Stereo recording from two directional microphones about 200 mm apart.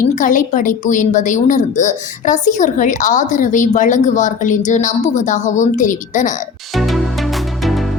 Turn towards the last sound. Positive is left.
turn(degrees=0)  # may be behind; listen again after turning